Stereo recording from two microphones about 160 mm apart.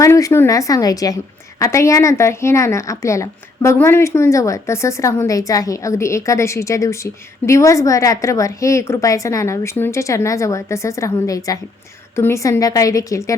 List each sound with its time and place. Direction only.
0.0 s a woman's voice: 20° left (ahead or behind)